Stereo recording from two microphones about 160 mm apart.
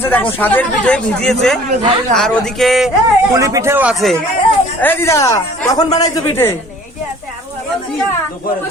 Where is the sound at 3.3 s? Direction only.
20° right (ahead or behind).